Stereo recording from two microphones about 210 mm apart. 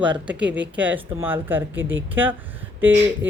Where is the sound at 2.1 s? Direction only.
10° right (ahead or behind).